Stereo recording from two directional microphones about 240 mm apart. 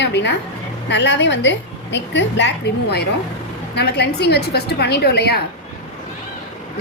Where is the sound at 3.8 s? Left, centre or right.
Left.